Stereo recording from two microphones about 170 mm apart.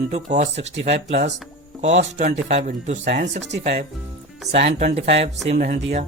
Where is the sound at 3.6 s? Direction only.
40° right (ahead or behind).